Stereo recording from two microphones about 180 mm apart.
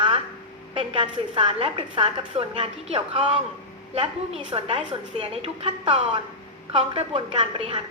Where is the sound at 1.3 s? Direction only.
25° right (ahead or behind).